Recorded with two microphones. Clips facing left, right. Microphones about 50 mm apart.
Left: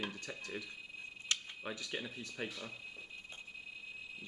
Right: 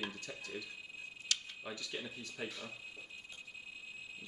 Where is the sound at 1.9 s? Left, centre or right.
Centre.